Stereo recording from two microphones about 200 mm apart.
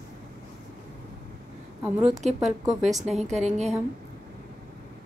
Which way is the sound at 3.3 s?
35° right (ahead or behind).